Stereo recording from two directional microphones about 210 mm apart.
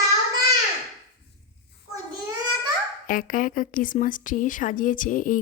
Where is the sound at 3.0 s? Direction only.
40° left (ahead or behind).